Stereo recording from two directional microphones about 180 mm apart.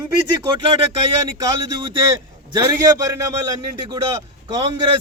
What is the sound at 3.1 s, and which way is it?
Speech, 20° right (ahead or behind).